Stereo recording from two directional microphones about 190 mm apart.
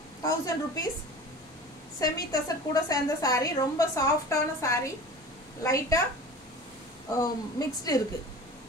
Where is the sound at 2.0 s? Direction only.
20° left (ahead or behind).